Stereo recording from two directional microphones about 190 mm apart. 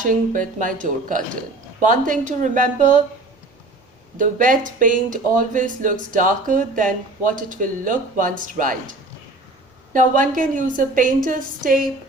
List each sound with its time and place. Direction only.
0.0 s speech: 45° right (ahead or behind)
4.2 s speech: 45° right (ahead or behind)
9.9 s speech: 45° right (ahead or behind)